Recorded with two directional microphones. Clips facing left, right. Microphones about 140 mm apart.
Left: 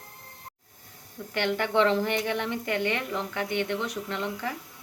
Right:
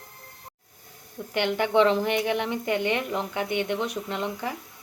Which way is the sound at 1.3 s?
15° right (ahead or behind).